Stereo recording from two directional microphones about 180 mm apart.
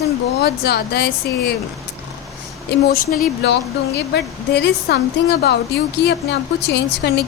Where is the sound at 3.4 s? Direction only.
70° left (ahead or behind).